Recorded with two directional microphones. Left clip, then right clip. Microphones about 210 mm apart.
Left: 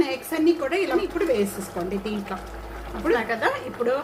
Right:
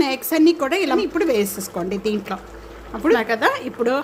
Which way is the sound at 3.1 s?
55° right (ahead or behind).